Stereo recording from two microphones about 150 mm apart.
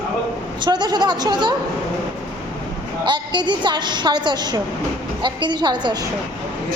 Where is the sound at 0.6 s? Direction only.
30° right (ahead or behind).